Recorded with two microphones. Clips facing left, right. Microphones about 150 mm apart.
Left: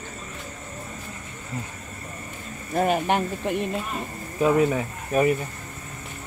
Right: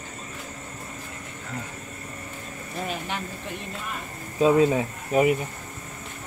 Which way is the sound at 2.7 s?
55° left (ahead or behind).